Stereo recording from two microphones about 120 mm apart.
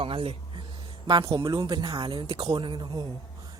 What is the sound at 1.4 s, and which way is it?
Speech, 35° right (ahead or behind).